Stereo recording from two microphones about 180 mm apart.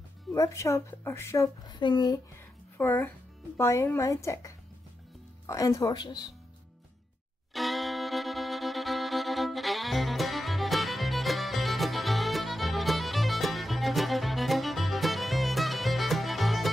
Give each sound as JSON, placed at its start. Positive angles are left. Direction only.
{"t": 0.3, "sound": "speech", "side_deg": 15}
{"t": 2.3, "sound": "a sound", "side_deg": 10}
{"t": 3.5, "sound": "speech", "side_deg": 15}
{"t": 7.5, "sound": "violin", "side_deg": 0}